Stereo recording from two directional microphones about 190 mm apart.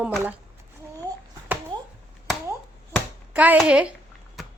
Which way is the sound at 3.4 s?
5° right (ahead or behind).